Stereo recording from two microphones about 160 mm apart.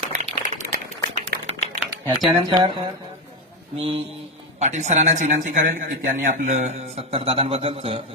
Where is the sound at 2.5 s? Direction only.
35° right (ahead or behind).